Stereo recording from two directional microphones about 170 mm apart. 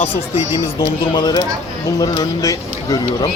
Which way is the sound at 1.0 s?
25° left (ahead or behind).